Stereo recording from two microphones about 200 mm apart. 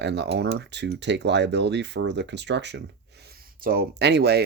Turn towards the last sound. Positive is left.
turn(degrees=-55)  # may be behind; listen again after turning